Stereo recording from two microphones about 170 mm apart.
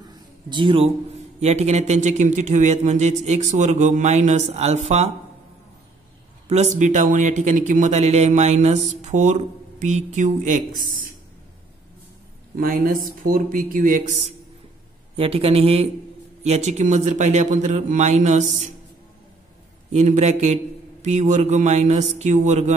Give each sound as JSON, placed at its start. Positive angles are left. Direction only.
{"t": 0.0, "sound": "a sound", "side_deg": -25}
{"t": 1.4, "sound": "speech", "side_deg": -40}
{"t": 6.5, "sound": "speech", "side_deg": -45}
{"t": 12.5, "sound": "a man's voice", "side_deg": -55}
{"t": 19.9, "sound": "a man's voice", "side_deg": -45}